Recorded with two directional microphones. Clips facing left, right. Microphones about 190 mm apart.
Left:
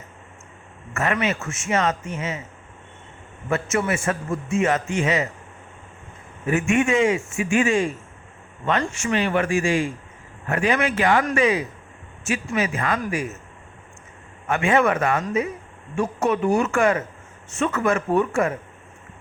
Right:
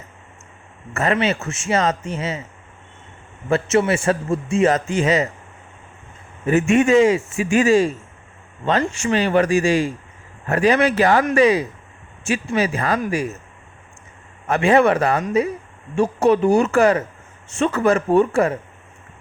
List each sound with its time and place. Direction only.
0.9 s speech: 30° right (ahead or behind)
3.5 s a man's voice: 30° right (ahead or behind)
6.5 s speech: 35° right (ahead or behind)
8.9 s speech: 35° right (ahead or behind)
14.4 s speech: 35° right (ahead or behind)